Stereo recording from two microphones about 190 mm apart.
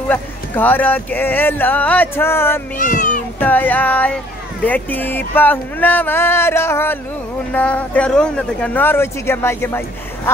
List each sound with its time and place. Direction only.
0.1 s speech: 10° left (ahead or behind)
2.8 s cat: 40° left (ahead or behind)
3.3 s speech: 10° left (ahead or behind)